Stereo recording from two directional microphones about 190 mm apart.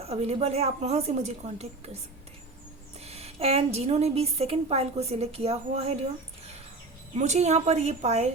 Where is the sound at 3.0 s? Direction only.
35° right (ahead or behind).